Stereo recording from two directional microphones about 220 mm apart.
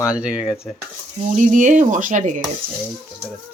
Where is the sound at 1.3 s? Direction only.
35° right (ahead or behind).